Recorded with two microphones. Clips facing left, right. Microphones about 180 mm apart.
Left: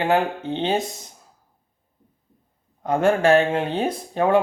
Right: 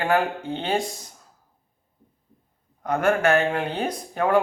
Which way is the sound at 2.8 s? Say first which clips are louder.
Left 3 dB; 25° left (ahead or behind).